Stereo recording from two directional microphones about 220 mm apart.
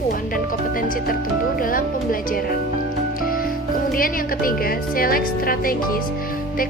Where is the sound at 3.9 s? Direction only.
40° left (ahead or behind).